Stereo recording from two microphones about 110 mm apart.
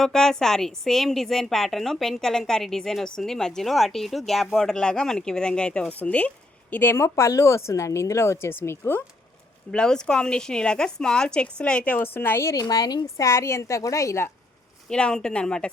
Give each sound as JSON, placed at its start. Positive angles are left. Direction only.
{"t": 0.0, "sound": "a woman's voice", "side_deg": 5}
{"t": 9.7, "sound": "a woman's voice", "side_deg": 5}
{"t": 12.6, "sound": "a woman's voice", "side_deg": 35}
{"t": 13.2, "sound": "speech", "side_deg": 25}
{"t": 14.8, "sound": "a woman's voice", "side_deg": 10}